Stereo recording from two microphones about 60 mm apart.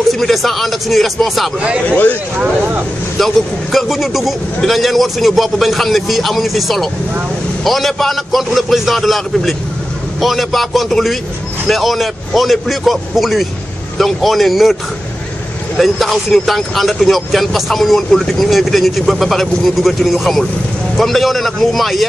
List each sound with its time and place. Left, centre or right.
0.1 s speech: centre
1.9 s speech: left
2.3 s speech: right
3.2 s speech: centre
15.8 s speech: centre